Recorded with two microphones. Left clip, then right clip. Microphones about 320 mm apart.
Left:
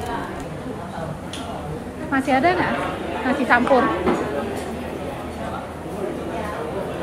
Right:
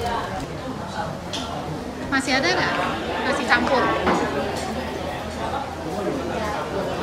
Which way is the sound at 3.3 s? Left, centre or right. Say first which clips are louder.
Left 2 dB; centre.